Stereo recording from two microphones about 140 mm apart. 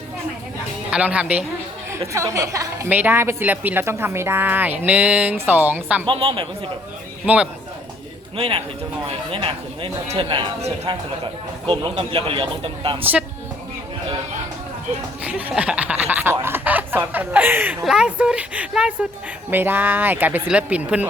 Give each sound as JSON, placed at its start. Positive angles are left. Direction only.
{"t": 0.9, "sound": "speech", "side_deg": -10}
{"t": 1.9, "sound": "a woman's voice", "side_deg": -20}
{"t": 6.1, "sound": "speech", "side_deg": -40}
{"t": 8.4, "sound": "speech", "side_deg": -40}
{"t": 13.0, "sound": "a woman's voice", "side_deg": -15}
{"t": 15.2, "sound": "a woman's voice", "side_deg": -10}